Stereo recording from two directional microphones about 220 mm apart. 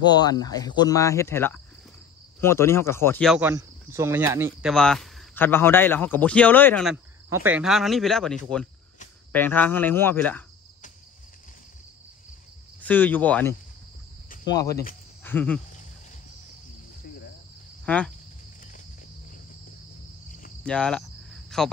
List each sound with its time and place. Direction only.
0.0 s speech: 20° left (ahead or behind)
3.3 s speech: 10° right (ahead or behind); by 10.4 s 10° left (ahead or behind)
12.8 s speech: 10° left (ahead or behind)
17.8 s speech: 5° left (ahead or behind)
20.6 s cricket: 5° left (ahead or behind)